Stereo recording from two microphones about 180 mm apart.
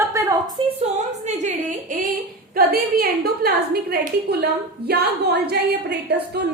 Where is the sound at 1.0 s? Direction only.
40° right (ahead or behind); by 6.4 s 65° right (ahead or behind).